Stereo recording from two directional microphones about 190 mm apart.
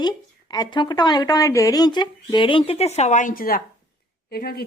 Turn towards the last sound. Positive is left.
turn(degrees=55)  # may be behind; listen again after turning